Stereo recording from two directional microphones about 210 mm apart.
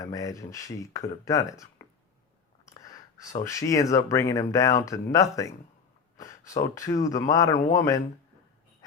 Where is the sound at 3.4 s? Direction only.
15° left (ahead or behind).